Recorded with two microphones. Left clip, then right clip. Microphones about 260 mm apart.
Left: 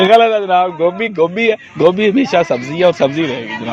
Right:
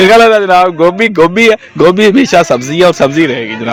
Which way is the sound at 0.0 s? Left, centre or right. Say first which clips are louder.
Right 5 dB; right.